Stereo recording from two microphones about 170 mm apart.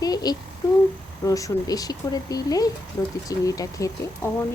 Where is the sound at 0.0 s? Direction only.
20° left (ahead or behind).